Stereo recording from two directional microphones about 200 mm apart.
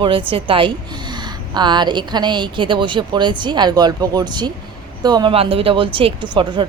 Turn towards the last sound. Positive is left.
turn(degrees=-20)  # may be behind; listen again after turning